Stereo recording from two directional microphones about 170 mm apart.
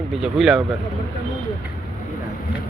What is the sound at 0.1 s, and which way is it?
Speech, centre (ahead or behind).